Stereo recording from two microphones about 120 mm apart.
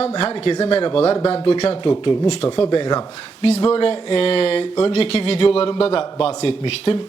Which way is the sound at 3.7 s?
50° left (ahead or behind).